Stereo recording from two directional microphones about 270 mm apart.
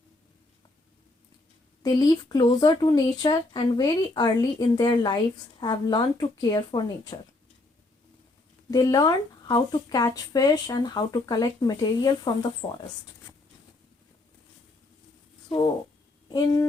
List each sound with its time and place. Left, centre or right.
1.8 s speech: centre
8.7 s speech: centre
15.4 s speech: centre